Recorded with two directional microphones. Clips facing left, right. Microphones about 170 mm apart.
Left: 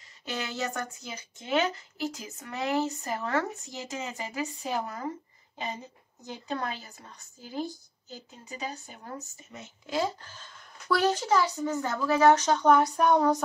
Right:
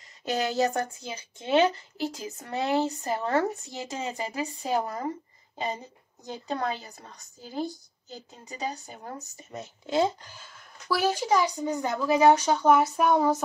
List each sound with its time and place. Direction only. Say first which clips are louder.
0.2 s a woman's voice: right 8 dB; 40° right (ahead or behind)
6.2 s a woman's voice: right 3 dB; 35° right (ahead or behind)
8.5 s a woman's voice: right 3 dB; 40° right (ahead or behind)
9.8 s speech: right 5 dB; 25° right (ahead or behind)
10.3 s a woman's voice: even; 5° right (ahead or behind)